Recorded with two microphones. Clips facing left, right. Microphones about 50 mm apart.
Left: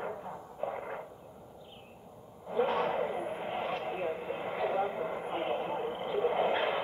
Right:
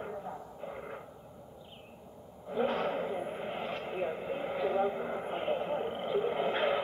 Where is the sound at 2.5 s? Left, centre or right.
Centre.